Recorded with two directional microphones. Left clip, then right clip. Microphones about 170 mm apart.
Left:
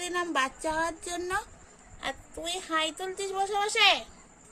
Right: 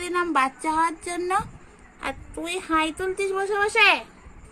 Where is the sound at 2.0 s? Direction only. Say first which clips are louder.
Right 4 dB; 25° right (ahead or behind).